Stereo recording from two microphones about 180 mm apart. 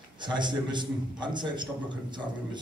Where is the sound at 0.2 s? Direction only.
25° right (ahead or behind).